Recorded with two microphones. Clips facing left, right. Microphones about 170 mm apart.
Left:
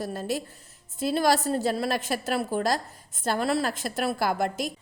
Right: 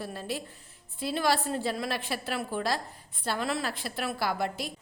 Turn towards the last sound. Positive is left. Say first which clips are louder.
# left 4 dB
turn(degrees=45)  # may be behind; listen again after turning